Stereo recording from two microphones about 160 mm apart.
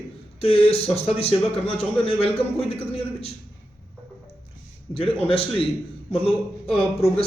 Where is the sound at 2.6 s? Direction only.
40° left (ahead or behind).